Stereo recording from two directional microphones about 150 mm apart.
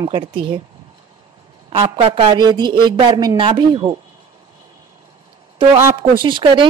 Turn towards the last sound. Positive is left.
turn(degrees=-35)  # may be behind; listen again after turning